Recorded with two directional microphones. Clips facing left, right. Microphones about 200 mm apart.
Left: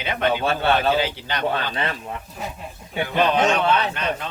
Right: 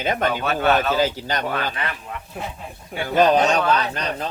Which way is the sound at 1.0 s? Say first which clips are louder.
Right 3 dB; 40° right (ahead or behind).